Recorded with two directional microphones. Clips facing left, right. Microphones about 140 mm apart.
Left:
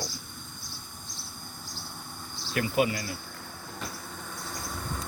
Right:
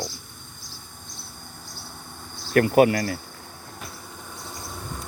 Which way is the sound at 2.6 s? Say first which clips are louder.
Right 10 dB; 60° right (ahead or behind).